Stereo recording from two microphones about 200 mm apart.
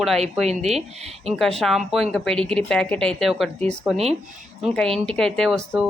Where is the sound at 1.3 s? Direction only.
Centre (ahead or behind).